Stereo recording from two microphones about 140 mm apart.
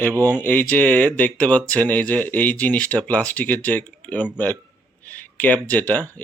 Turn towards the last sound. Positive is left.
turn(degrees=10)  # may be behind; listen again after turning